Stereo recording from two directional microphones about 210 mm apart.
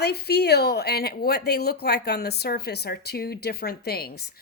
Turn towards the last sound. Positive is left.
turn(degrees=50)  # may be behind; listen again after turning